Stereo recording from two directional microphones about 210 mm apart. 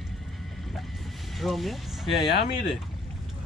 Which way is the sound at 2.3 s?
55° left (ahead or behind).